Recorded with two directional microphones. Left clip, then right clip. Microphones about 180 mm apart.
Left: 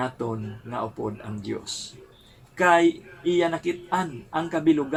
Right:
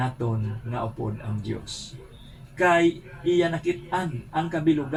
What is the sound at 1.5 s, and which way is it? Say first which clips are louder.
A man's voice: left 4 dB; 45° left (ahead or behind).